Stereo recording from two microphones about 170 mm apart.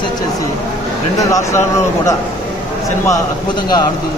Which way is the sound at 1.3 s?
20° left (ahead or behind).